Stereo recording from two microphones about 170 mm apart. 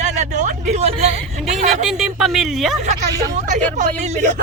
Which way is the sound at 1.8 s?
5° right (ahead or behind).